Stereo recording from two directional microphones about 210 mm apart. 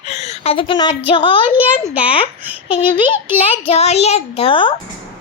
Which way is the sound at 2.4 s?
5° right (ahead or behind).